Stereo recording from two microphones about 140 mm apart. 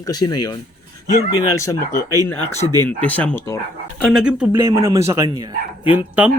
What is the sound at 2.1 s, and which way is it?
Speech, 15° left (ahead or behind).